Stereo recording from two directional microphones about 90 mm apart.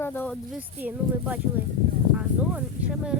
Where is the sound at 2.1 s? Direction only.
10° right (ahead or behind).